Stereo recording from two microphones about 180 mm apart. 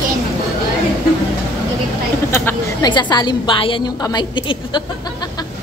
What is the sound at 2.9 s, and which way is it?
A woman's voice, 25° left (ahead or behind).